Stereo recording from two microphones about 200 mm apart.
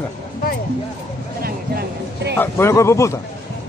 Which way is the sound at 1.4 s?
50° right (ahead or behind).